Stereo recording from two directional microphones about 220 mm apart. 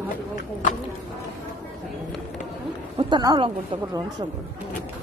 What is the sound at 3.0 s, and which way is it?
Speech, 20° right (ahead or behind).